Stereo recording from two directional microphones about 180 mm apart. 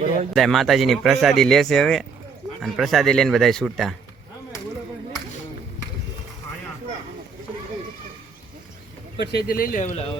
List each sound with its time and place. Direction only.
0.3 s speech: centre (ahead or behind)
9.1 s speech: 65° left (ahead or behind); by 10.1 s 40° left (ahead or behind)